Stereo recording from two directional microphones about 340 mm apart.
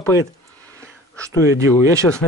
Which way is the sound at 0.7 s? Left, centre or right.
Centre.